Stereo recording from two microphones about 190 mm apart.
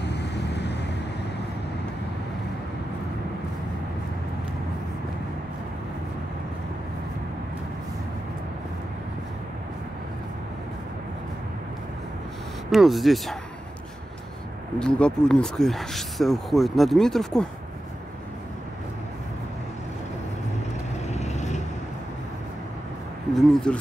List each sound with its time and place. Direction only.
0.0 s vehicle: 60° left (ahead or behind)
12.7 s speech: centre (ahead or behind)
14.8 s speech: 5° left (ahead or behind)
21.1 s vehicle: 35° left (ahead or behind)
23.3 s speech: 5° left (ahead or behind)